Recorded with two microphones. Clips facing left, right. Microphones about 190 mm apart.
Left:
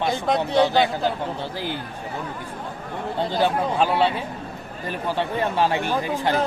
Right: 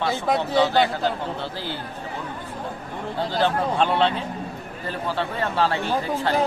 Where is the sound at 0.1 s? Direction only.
Centre (ahead or behind).